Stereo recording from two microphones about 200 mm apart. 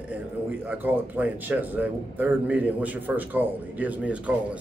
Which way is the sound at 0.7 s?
10° right (ahead or behind).